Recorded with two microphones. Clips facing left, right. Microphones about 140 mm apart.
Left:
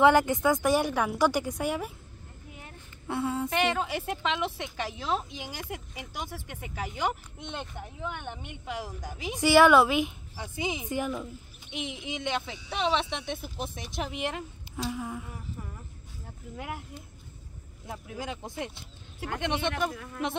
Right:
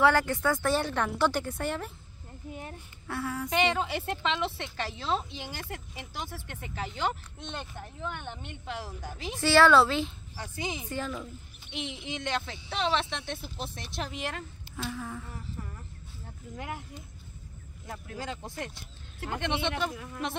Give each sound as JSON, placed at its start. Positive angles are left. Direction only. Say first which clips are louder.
{"t": 0.0, "sound": "speech", "louder": "left 3 dB", "side_deg": 20}
{"t": 3.1, "sound": "child singing", "louder": "left 4 dB", "side_deg": 25}
{"t": 3.4, "sound": "speech", "louder": "even", "side_deg": 5}
{"t": 19.9, "sound": "speech", "louder": "even", "side_deg": -5}